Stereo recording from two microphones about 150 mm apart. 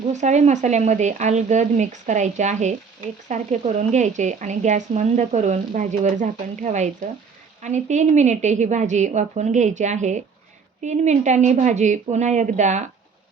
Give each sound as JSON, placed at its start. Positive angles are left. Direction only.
{"t": 0.1, "sound": "speech", "side_deg": -50}